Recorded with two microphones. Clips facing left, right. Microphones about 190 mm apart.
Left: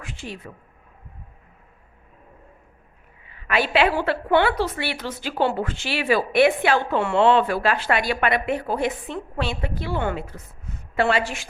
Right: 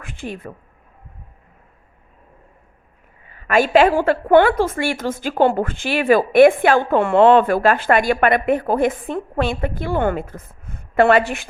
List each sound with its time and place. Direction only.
0.0 s speech: 55° right (ahead or behind)
3.2 s a woman's voice: 45° right (ahead or behind)